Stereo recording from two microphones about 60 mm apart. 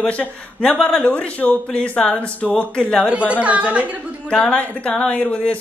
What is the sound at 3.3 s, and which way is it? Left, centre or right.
Speech, right.